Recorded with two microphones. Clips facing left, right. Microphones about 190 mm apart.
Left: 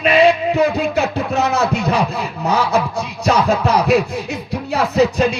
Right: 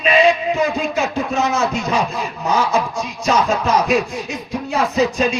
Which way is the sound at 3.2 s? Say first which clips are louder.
Left 2 dB; 60° left (ahead or behind).